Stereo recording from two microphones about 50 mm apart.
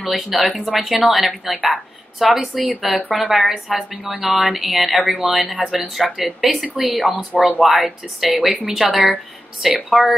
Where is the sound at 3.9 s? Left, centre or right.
Right.